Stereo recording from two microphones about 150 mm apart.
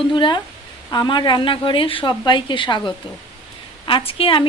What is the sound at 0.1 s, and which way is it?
A woman's voice, 30° left (ahead or behind).